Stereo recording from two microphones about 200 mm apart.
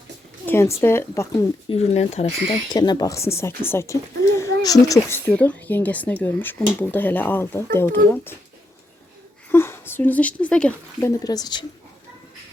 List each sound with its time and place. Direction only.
0.4 s speech: 10° left (ahead or behind)
1.7 s speech: 30° left (ahead or behind); by 8.4 s 10° left (ahead or behind)
9.5 s speech: 10° left (ahead or behind)
11.2 s speech: 20° left (ahead or behind)